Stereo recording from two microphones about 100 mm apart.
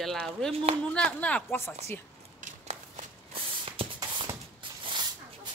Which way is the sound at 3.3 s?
65° right (ahead or behind).